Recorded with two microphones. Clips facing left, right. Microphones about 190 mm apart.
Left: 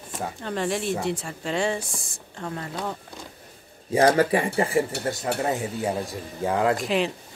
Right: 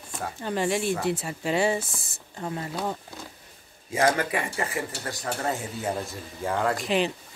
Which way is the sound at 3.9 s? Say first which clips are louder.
Left 5 dB; 35° left (ahead or behind).